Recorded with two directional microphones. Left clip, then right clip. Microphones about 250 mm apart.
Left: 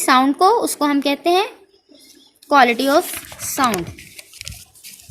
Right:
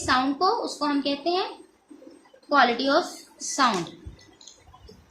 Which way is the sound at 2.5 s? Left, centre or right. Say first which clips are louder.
Left 7 dB; left.